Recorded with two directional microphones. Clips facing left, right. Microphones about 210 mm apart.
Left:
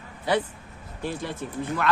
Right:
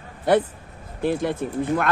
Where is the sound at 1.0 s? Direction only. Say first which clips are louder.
Right 8 dB; 50° right (ahead or behind).